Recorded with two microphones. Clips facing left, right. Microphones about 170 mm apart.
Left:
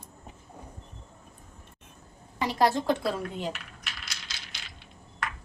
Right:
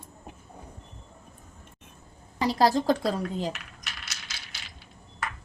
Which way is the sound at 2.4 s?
35° right (ahead or behind).